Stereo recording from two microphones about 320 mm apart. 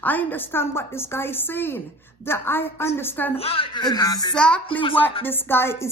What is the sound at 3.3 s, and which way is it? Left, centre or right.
A woman's voice, centre.